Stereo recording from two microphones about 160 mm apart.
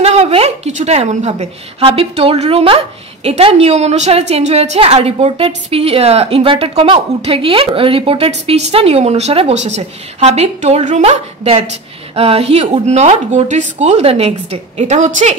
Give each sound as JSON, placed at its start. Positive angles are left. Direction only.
{"t": 0.0, "sound": "a woman's voice", "side_deg": -40}